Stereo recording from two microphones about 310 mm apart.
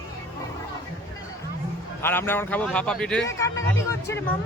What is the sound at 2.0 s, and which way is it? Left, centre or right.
A man's voice, centre.